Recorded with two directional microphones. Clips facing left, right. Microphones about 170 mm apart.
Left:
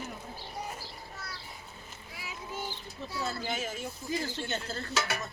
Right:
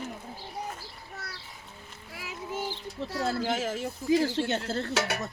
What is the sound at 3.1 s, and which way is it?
Speech, 90° right.